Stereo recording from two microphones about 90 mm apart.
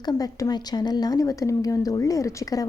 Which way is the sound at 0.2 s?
40° left (ahead or behind).